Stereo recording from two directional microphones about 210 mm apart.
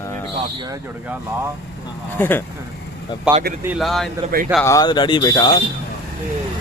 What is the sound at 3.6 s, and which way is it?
Speech, centre (ahead or behind).